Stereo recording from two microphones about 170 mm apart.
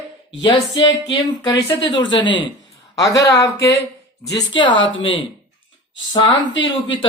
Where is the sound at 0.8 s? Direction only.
25° left (ahead or behind).